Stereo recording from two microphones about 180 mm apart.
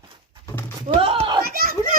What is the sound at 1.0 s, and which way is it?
Children playing, 30° right (ahead or behind).